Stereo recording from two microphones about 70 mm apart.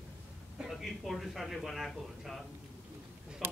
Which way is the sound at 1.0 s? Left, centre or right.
Centre.